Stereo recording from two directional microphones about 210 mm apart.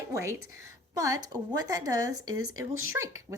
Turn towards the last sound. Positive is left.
turn(degrees=-15)  # may be behind; listen again after turning